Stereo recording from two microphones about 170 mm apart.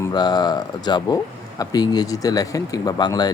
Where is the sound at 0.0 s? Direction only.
25° left (ahead or behind).